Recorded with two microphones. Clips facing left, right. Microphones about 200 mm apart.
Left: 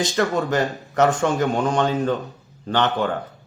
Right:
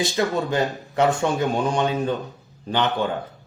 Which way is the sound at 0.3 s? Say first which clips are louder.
Left 1 dB; centre (ahead or behind).